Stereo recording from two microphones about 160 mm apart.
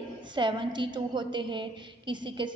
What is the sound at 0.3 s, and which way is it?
A woman's voice, 30° right (ahead or behind).